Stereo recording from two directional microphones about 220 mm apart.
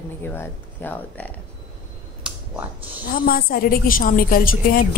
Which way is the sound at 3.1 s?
45° left (ahead or behind).